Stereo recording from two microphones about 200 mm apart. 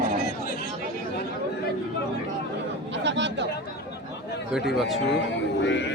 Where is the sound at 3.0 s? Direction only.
60° right (ahead or behind).